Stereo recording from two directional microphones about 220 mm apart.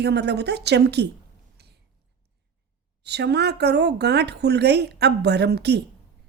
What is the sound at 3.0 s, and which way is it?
Speech, 50° right (ahead or behind).